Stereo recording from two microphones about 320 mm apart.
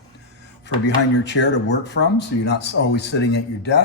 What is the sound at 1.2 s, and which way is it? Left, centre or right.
A man's voice, left.